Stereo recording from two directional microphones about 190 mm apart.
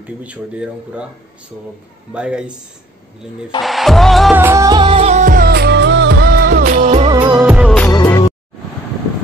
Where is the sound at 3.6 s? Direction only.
Centre (ahead or behind).